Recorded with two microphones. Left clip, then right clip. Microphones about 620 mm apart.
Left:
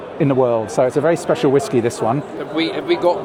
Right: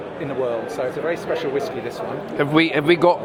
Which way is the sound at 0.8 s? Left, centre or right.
Left.